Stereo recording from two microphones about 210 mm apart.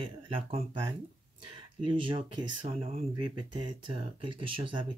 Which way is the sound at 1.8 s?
25° right (ahead or behind).